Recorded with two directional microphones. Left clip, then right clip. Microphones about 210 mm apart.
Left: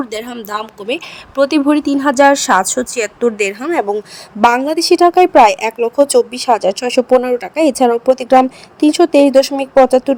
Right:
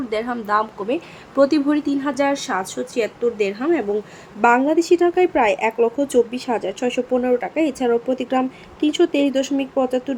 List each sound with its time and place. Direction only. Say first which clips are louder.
0.1 s a woman's voice: right 2 dB; 50° left (ahead or behind)